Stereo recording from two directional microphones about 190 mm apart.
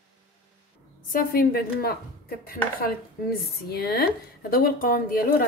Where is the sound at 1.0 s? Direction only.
50° left (ahead or behind).